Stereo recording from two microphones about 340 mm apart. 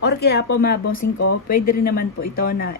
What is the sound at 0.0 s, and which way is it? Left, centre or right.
Speech, left.